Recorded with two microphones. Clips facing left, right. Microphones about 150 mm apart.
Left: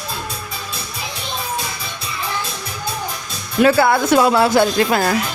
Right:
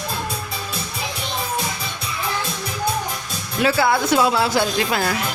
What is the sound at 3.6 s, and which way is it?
Speech, 50° left (ahead or behind).